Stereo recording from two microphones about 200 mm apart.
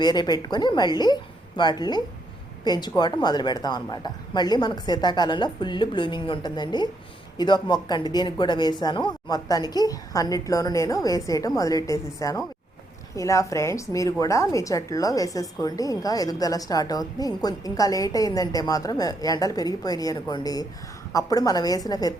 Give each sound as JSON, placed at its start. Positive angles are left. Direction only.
{"t": 0.0, "sound": "a woman's voice", "side_deg": 20}